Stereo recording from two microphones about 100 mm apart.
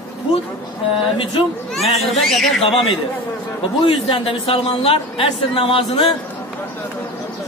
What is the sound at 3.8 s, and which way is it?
A man's voice, 60° left (ahead or behind).